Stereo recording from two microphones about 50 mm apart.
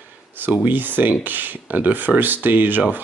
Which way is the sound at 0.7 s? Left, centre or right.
Right.